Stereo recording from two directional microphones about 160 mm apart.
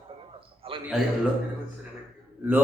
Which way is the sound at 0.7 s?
35° right (ahead or behind).